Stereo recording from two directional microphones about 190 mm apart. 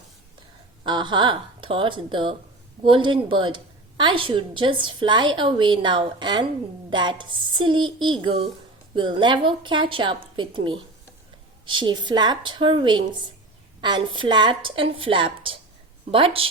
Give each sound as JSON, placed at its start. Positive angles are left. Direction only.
{"t": 0.9, "sound": "a woman's voice", "side_deg": -25}